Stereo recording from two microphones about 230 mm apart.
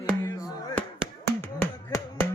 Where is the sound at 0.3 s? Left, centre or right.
Centre.